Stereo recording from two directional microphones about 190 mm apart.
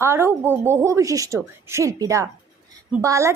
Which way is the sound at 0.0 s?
15° right (ahead or behind).